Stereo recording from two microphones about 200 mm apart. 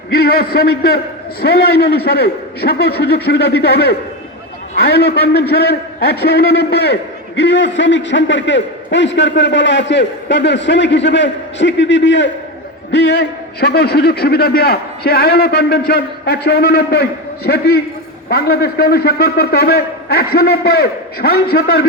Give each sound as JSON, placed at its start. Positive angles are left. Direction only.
{"t": 0.1, "sound": "a man's voice", "side_deg": 50}